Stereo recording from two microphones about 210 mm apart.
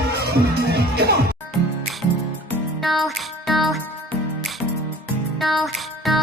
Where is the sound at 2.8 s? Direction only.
Centre (ahead or behind).